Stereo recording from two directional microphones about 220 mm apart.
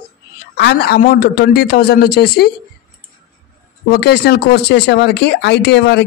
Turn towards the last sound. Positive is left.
turn(degrees=50)  # may be behind; listen again after turning